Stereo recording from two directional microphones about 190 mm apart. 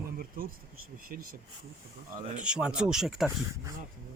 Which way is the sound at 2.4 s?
5° right (ahead or behind).